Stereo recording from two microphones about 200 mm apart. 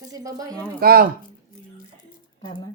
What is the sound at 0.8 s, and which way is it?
Speech, 50° right (ahead or behind).